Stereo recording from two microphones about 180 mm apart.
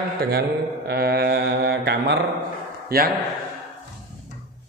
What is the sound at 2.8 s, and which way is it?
Speech, 55° right (ahead or behind).